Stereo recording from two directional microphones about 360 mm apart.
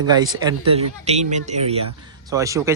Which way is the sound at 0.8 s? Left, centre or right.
Centre.